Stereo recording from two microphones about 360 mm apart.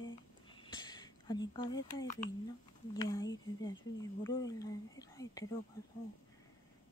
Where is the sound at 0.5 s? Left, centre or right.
Centre.